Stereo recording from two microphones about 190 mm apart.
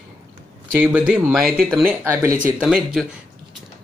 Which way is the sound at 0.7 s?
10° right (ahead or behind).